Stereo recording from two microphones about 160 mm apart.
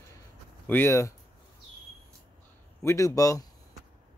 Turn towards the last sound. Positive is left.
turn(degrees=20)  # may be behind; listen again after turning